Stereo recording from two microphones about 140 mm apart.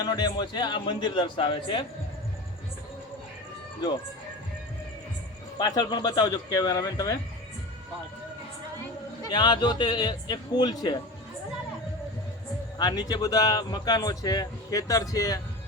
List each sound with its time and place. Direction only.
0.0 s a man's voice: 30° left (ahead or behind)
5.5 s speech: 30° left (ahead or behind)
9.3 s a man's voice: 30° left (ahead or behind)
12.8 s speech: 30° left (ahead or behind)